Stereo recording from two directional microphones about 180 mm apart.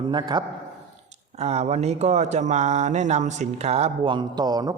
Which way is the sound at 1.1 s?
35° right (ahead or behind).